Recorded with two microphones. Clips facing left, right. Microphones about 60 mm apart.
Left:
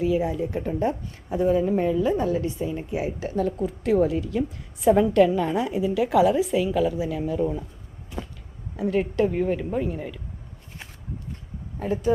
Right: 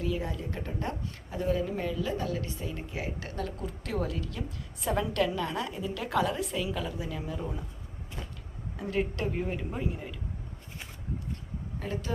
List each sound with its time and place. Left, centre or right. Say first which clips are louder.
0.0 s a woman's voice: left 10 dB; centre
8.7 s a woman's voice: left 8 dB; centre
11.8 s speech: left 12 dB; centre